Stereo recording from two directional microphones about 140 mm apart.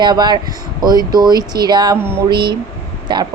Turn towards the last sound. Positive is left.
turn(degrees=-35)  # may be behind; listen again after turning